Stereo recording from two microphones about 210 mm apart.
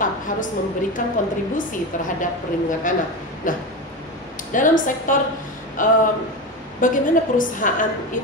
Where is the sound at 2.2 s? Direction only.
40° left (ahead or behind).